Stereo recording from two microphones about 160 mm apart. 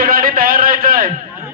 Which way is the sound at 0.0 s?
65° right (ahead or behind).